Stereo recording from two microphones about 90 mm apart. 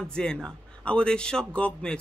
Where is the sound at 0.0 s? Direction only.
10° left (ahead or behind).